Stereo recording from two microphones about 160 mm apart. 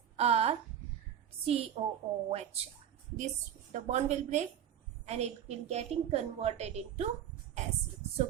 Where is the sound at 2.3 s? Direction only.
40° right (ahead or behind).